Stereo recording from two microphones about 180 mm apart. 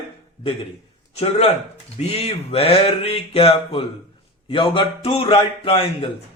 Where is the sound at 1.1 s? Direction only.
35° left (ahead or behind).